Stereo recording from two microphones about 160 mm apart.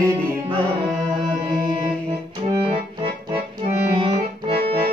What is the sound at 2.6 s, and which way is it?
Accordion, 35° right (ahead or behind).